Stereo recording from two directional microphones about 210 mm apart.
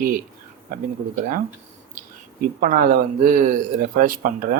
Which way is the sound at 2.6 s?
40° right (ahead or behind).